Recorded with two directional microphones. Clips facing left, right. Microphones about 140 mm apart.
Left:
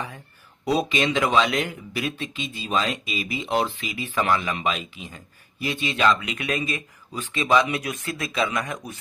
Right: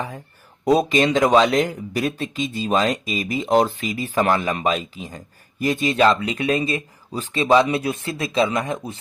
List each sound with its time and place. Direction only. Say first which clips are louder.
0.6 s speech: right 6 dB; 45° right (ahead or behind); by 9.0 s 25° right (ahead or behind)